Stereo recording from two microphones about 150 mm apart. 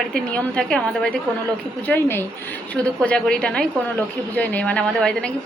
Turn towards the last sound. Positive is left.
turn(degrees=5)  # may be behind; listen again after turning